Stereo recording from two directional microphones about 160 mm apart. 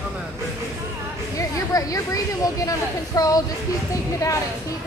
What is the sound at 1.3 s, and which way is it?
Speech, 20° left (ahead or behind).